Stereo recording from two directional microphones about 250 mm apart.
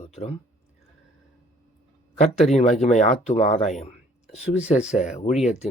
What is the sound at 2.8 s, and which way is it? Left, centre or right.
Speech, left.